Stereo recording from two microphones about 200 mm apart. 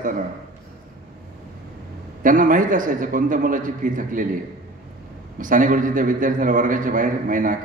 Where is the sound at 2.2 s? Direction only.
40° right (ahead or behind).